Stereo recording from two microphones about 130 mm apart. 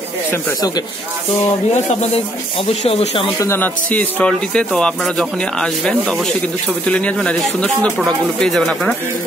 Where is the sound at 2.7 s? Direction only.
50° left (ahead or behind).